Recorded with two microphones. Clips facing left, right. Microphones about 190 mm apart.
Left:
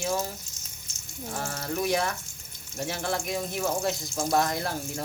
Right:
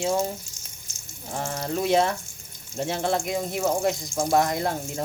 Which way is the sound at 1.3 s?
20° right (ahead or behind).